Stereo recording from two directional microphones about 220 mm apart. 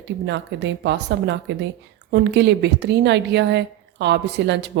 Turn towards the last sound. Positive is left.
turn(degrees=-50)  # may be behind; listen again after turning